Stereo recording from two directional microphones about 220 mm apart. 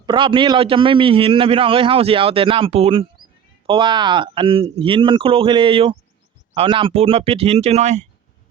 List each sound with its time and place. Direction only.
0.0 s a man's voice: 20° right (ahead or behind)